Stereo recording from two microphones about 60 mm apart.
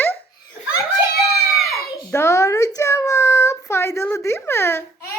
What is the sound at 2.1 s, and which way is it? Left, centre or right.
A child's voice, left.